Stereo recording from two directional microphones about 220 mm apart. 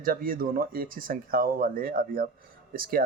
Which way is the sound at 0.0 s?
40° right (ahead or behind).